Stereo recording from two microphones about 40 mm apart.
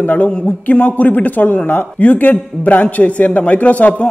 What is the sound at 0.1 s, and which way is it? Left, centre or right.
A man's voice, left.